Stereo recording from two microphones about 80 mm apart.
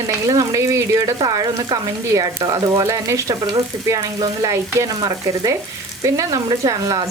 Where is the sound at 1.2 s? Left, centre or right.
Right.